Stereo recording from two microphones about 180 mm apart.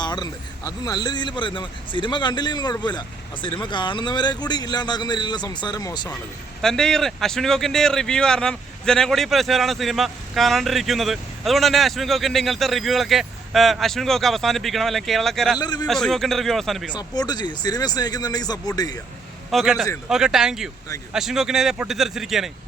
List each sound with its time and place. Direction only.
0.0 s speech: 25° left (ahead or behind)
6.6 s a man's voice: 5° left (ahead or behind)
15.5 s speech: 25° left (ahead or behind)
15.9 s a man's voice: centre (ahead or behind)
16.9 s speech: 20° left (ahead or behind)
19.5 s a man's voice: centre (ahead or behind)